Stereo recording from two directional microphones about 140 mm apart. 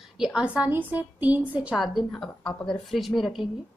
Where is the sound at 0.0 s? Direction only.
5° right (ahead or behind).